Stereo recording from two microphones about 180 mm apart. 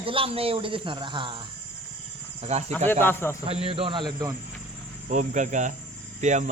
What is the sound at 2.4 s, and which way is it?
Speech, 35° right (ahead or behind).